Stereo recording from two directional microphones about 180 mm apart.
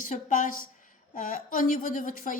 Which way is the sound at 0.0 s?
45° left (ahead or behind).